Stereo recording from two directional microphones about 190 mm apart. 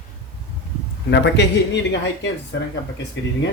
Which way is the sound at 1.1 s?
65° left (ahead or behind).